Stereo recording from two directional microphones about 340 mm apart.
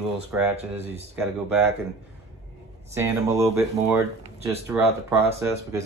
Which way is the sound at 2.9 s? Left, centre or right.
Centre.